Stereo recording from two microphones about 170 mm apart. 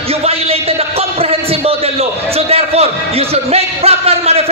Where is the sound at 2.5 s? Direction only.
35° right (ahead or behind).